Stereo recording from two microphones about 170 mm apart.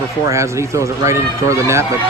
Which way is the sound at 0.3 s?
15° right (ahead or behind).